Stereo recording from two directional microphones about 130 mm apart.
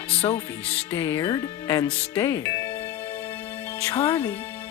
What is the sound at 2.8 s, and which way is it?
Music, 15° left (ahead or behind).